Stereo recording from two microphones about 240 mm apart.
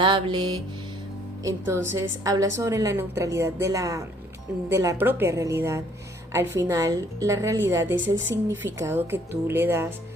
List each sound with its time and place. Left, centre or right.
0.0 s music: right
1.5 s a woman's voice: centre